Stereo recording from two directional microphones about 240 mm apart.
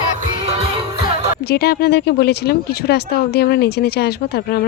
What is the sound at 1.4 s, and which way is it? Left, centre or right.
Speech, left.